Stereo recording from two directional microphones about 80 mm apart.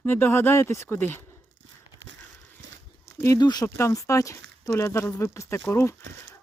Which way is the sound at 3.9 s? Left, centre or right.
Left.